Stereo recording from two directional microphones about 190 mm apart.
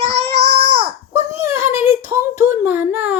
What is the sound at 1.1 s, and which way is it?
Speech, 15° right (ahead or behind).